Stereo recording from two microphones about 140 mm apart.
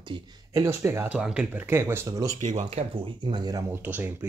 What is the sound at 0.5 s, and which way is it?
Speech, 20° right (ahead or behind).